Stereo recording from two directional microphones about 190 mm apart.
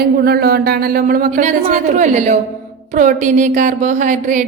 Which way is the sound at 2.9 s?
40° right (ahead or behind).